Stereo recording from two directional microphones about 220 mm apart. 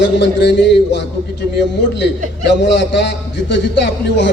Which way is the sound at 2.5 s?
55° left (ahead or behind).